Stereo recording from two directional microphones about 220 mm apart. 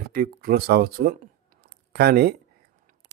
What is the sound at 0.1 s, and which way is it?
Speech, 40° right (ahead or behind).